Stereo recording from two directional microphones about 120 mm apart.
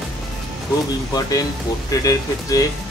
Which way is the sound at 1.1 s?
30° left (ahead or behind).